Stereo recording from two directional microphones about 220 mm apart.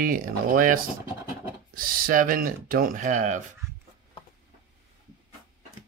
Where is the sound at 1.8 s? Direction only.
40° right (ahead or behind).